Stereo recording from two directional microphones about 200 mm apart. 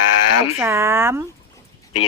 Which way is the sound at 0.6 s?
10° right (ahead or behind).